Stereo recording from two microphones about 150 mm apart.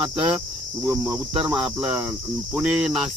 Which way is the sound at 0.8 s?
15° right (ahead or behind).